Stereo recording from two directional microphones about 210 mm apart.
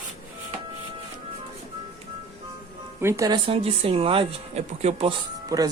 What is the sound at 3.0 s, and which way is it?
Speech, 15° right (ahead or behind).